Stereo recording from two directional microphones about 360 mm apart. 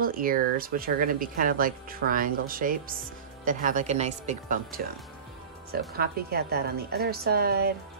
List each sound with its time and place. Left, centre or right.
0.0 s speech: right